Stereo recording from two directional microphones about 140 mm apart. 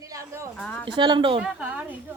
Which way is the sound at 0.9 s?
35° right (ahead or behind).